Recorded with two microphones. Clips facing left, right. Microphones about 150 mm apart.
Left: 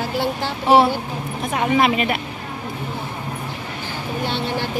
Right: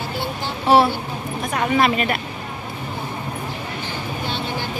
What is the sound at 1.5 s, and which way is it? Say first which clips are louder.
Speech: left 1 dB; 10° left (ahead or behind).